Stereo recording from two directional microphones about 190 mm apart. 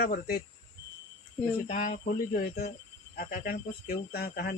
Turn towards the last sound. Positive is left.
turn(degrees=55)  # may be behind; listen again after turning